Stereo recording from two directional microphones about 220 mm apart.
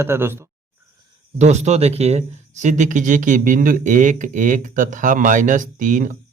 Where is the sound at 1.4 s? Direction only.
30° right (ahead or behind).